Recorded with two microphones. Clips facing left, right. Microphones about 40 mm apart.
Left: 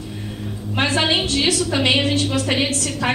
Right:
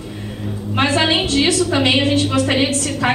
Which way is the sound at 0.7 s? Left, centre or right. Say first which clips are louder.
Right 3 dB; centre.